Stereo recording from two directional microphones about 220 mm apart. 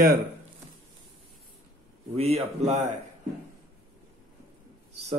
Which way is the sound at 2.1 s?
30° right (ahead or behind).